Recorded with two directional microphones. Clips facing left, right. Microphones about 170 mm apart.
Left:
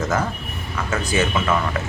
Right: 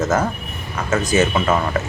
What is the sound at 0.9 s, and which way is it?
Speech, 40° right (ahead or behind).